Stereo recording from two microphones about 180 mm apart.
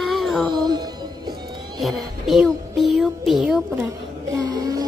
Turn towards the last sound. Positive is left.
turn(degrees=-20)  # may be behind; listen again after turning